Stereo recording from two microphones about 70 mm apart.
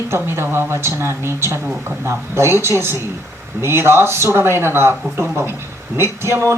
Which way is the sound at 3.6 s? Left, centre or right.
Right.